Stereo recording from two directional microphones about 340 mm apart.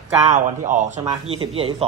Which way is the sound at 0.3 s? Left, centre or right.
Right.